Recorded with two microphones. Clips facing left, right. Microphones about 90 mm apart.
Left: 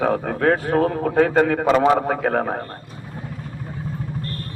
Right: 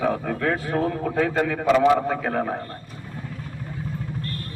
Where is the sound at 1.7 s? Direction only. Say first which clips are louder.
Right 2 dB; 35° left (ahead or behind).